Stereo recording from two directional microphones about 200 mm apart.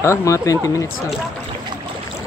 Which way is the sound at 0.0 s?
15° left (ahead or behind).